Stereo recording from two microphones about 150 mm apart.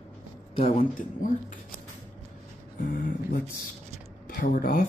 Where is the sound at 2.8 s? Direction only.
65° left (ahead or behind).